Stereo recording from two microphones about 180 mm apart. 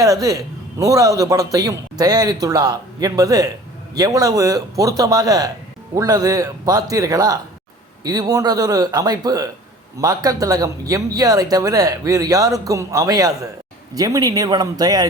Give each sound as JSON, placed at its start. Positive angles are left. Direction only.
{"t": 0.0, "sound": "speech", "side_deg": -20}